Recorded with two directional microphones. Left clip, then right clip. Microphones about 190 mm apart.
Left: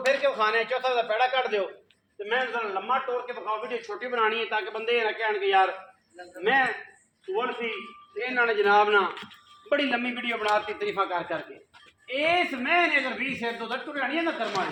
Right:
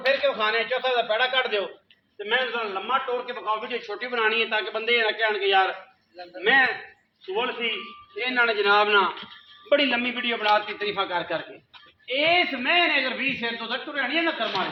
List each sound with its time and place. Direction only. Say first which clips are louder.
0.0 s a man's voice: right 1 dB; 10° right (ahead or behind)
2.1 s a man's voice: right 2 dB; 25° right (ahead or behind)